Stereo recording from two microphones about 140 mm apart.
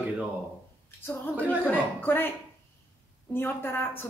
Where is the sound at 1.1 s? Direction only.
10° left (ahead or behind).